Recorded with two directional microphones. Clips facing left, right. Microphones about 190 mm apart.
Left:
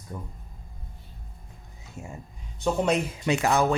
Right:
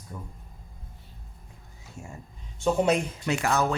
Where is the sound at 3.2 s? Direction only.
15° left (ahead or behind).